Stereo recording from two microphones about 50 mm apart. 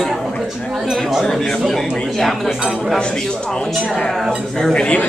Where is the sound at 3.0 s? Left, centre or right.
Centre.